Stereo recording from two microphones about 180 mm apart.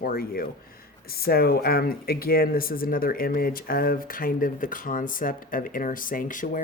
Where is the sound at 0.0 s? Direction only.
55° left (ahead or behind).